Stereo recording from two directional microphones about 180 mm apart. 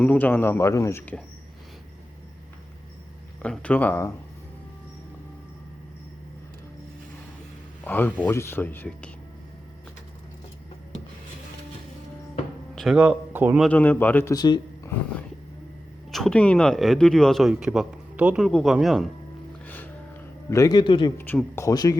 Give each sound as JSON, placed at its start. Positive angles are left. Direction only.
{"t": 0.0, "sound": "speech", "side_deg": 10}
{"t": 3.4, "sound": "speech", "side_deg": 5}
{"t": 7.9, "sound": "speech", "side_deg": 10}
{"t": 12.7, "sound": "a man's voice", "side_deg": 0}
{"t": 13.7, "sound": "speech", "side_deg": 10}
{"t": 16.1, "sound": "speech", "side_deg": 5}
{"t": 19.6, "sound": "music", "side_deg": 10}
{"t": 20.5, "sound": "a man's voice", "side_deg": 20}
{"t": 21.2, "sound": "speech", "side_deg": 10}